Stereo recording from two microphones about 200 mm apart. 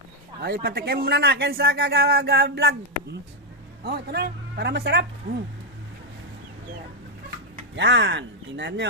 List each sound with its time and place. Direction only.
0.4 s speech: 50° right (ahead or behind)
7.8 s speech: 60° right (ahead or behind)